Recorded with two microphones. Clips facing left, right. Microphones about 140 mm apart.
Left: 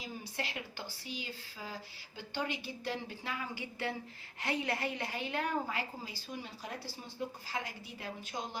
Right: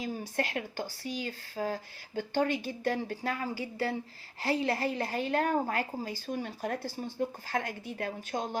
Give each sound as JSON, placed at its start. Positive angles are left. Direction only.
{"t": 0.0, "sound": "speech", "side_deg": -50}